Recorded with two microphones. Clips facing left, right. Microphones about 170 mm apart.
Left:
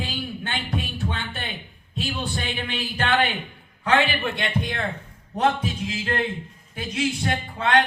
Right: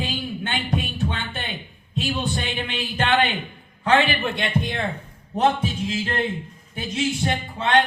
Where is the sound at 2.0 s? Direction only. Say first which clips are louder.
Right 3 dB; 20° right (ahead or behind).